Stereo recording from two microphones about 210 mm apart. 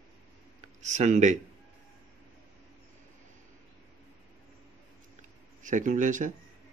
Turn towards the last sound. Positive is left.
turn(degrees=-35)  # may be behind; listen again after turning